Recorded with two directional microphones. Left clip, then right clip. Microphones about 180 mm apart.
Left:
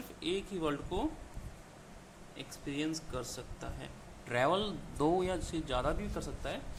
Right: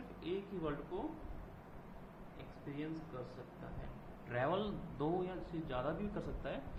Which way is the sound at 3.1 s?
50° left (ahead or behind).